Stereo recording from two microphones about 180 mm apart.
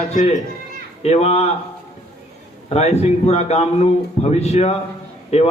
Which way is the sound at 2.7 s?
35° left (ahead or behind).